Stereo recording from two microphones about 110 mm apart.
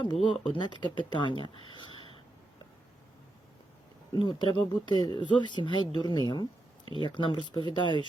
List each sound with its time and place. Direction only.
0.0 s speech: 45° left (ahead or behind)
4.2 s speech: 50° left (ahead or behind)